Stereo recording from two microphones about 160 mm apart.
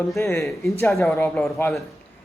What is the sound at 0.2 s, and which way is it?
Speech, 15° left (ahead or behind).